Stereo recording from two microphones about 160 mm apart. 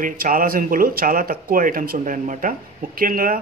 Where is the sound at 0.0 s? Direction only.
60° right (ahead or behind).